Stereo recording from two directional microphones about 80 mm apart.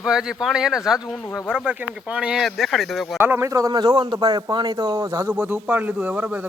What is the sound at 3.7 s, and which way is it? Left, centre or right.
A man's voice, right.